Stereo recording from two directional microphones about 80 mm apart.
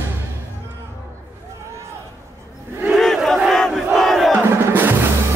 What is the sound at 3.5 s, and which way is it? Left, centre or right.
Crowd, centre.